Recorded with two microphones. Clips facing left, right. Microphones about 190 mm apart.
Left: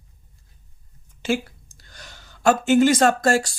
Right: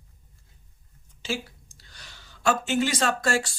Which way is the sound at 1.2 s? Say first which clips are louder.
Left 8 dB; 55° left (ahead or behind).